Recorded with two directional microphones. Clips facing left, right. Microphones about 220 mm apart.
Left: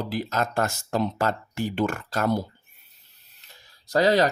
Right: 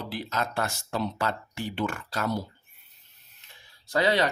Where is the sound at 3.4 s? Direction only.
40° left (ahead or behind).